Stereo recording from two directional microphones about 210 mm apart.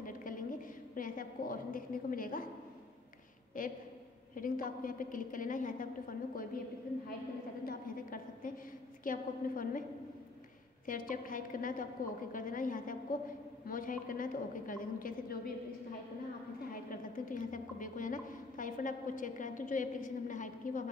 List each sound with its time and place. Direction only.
0.0 s a sound: 40° left (ahead or behind)
3.6 s a woman's voice: 40° left (ahead or behind)
7.6 s a woman's voice: 40° left (ahead or behind)
10.9 s a woman's voice: 40° left (ahead or behind)
16.9 s a woman's voice: 40° left (ahead or behind)